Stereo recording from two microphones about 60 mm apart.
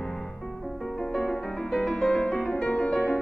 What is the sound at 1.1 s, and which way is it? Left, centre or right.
Music, centre.